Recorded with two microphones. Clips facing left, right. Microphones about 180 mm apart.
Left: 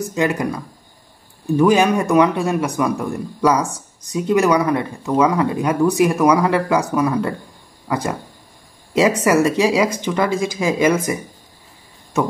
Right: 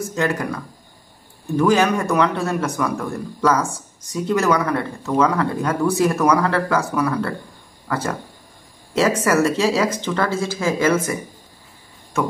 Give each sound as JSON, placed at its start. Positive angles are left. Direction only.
{"t": 0.1, "sound": "speech", "side_deg": 15}
{"t": 1.6, "sound": "speech", "side_deg": 15}